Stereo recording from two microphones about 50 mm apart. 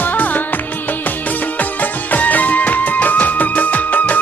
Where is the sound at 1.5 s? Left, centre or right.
Left.